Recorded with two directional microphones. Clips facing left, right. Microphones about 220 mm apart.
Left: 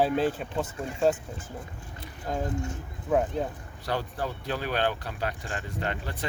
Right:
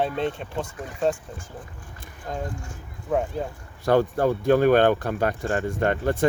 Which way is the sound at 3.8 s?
50° right (ahead or behind).